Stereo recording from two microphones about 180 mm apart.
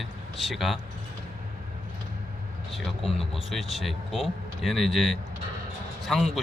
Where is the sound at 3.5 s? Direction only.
Centre (ahead or behind).